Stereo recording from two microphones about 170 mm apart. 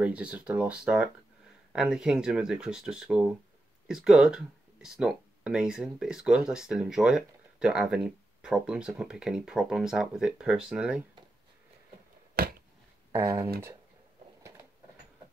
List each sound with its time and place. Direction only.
0.0 s speech: 5° right (ahead or behind)
12.4 s a sound: 60° right (ahead or behind)
13.1 s speech: 20° right (ahead or behind)